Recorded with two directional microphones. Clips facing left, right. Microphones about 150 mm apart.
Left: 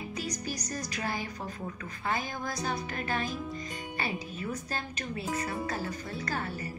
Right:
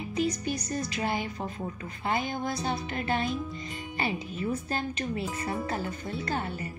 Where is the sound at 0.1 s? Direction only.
25° right (ahead or behind).